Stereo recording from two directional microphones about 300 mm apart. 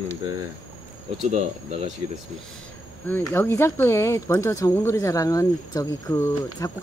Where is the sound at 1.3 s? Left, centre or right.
Right.